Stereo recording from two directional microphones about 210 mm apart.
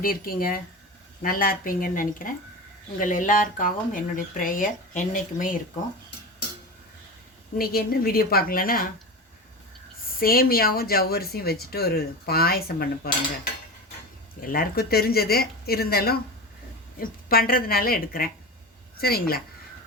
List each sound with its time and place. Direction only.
0.0 s speech: 45° left (ahead or behind)
7.6 s speech: 45° left (ahead or behind)
10.2 s speech: 45° left (ahead or behind)